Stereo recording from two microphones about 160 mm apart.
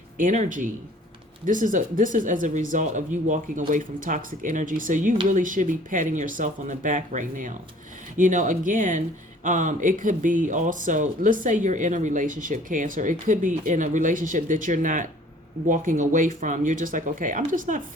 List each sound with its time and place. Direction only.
0.2 s speech: 55° right (ahead or behind)